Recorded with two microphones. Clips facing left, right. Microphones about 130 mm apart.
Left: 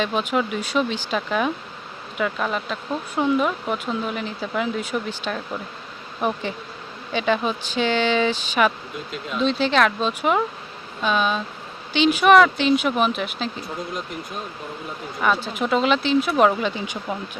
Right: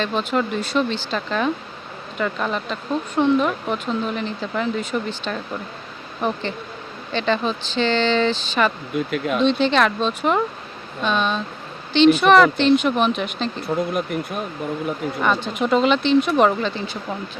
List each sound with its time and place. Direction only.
0.0 s speech: 10° left (ahead or behind)
9.0 s speech: 60° right (ahead or behind)
9.4 s speech: 5° left (ahead or behind)
15.2 s speech: 5° left (ahead or behind)